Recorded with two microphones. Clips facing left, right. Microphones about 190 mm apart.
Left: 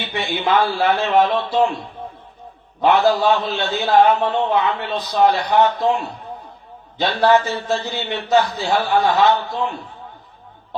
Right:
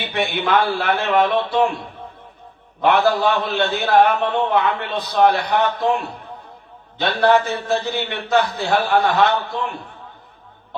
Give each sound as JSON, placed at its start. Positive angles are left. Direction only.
{"t": 0.0, "sound": "a man's voice", "side_deg": -55}